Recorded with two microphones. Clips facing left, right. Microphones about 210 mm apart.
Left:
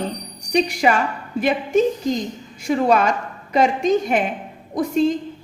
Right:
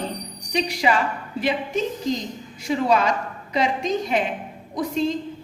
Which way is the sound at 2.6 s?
50° left (ahead or behind).